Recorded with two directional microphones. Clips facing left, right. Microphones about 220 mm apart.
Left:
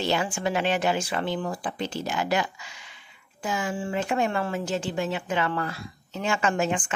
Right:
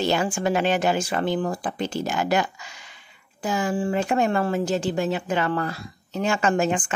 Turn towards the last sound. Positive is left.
turn(degrees=-40)  # may be behind; listen again after turning